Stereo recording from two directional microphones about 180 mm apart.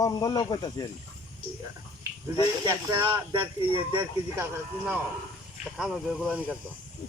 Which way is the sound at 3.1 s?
30° right (ahead or behind).